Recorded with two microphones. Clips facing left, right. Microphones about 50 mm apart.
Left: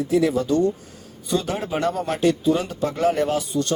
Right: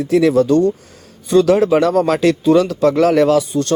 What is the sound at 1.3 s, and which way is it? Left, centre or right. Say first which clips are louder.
Speech: right 13 dB; right.